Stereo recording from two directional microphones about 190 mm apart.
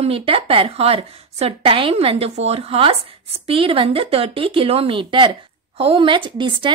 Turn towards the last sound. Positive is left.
turn(degrees=-25)  # may be behind; listen again after turning